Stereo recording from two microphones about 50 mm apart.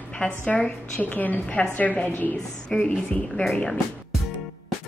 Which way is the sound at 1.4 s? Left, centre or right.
Centre.